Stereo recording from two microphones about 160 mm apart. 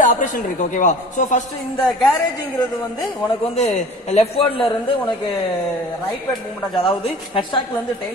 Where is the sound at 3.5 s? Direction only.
45° left (ahead or behind).